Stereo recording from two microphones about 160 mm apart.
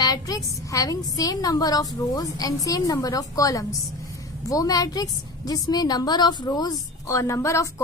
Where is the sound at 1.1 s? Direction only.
25° left (ahead or behind).